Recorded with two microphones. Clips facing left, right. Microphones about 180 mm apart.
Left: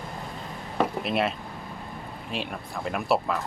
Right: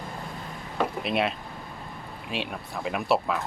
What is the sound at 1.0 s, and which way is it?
Speech, centre (ahead or behind).